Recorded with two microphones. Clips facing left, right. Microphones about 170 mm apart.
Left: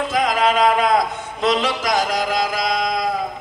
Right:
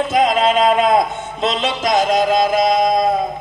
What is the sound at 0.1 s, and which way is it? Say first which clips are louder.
A man's voice: right 3 dB; 25° right (ahead or behind).